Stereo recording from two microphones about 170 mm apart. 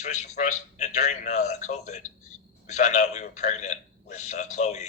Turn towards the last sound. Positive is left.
turn(degrees=45)  # may be behind; listen again after turning